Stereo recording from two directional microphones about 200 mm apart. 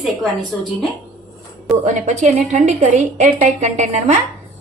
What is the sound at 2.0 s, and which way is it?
A woman's voice, 35° right (ahead or behind).